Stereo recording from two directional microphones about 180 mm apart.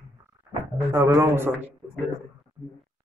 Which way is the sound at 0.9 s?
15° right (ahead or behind).